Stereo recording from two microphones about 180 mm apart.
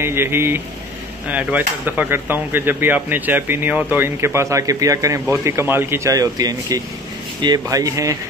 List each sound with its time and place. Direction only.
0.0 s speech: 15° right (ahead or behind)